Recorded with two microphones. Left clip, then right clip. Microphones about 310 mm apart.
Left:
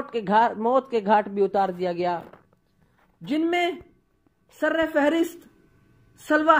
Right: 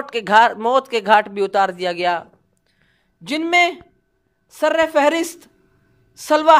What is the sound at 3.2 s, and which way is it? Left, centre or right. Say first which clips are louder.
Speech: right 2 dB; centre.